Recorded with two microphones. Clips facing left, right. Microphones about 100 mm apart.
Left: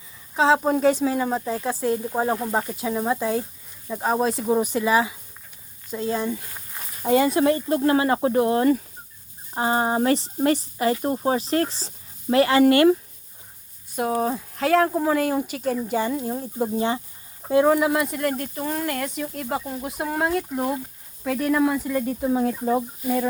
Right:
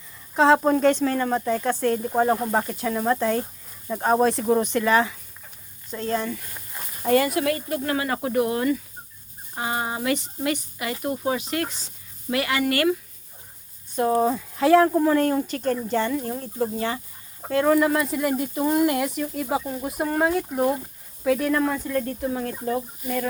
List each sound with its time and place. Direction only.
0.3 s speech: centre (ahead or behind); by 13.0 s 30° left (ahead or behind)
14.1 s speech: centre (ahead or behind)
22.2 s speech: 20° left (ahead or behind)